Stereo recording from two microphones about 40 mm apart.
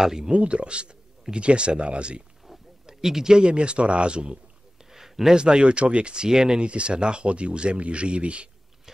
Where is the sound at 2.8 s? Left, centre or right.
Centre.